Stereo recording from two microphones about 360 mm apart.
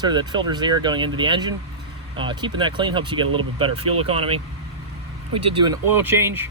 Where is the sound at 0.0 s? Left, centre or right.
Centre.